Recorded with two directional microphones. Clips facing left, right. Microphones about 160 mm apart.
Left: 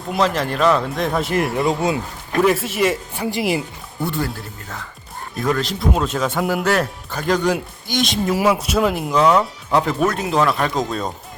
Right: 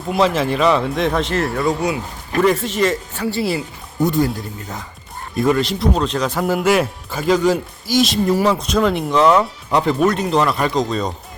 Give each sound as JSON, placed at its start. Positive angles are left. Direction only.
{"t": 0.1, "sound": "speech", "side_deg": 0}
{"t": 2.4, "sound": "speech", "side_deg": 5}
{"t": 4.0, "sound": "speech", "side_deg": -15}
{"t": 5.4, "sound": "speech", "side_deg": -5}